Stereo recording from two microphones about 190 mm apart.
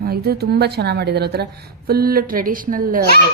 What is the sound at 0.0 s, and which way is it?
A woman's voice, 55° right (ahead or behind).